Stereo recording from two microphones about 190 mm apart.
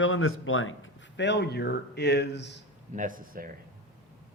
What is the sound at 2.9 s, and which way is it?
Speech, 45° right (ahead or behind).